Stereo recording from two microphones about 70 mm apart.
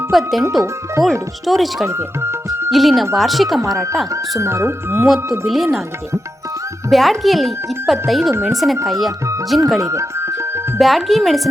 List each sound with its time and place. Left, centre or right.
0.1 s speech: centre
1.5 s speech: centre
1.9 s music: right
2.6 s speech: centre
4.1 s speech: right
4.9 s speech: centre
6.9 s speech: centre
9.9 s music: right
10.8 s speech: centre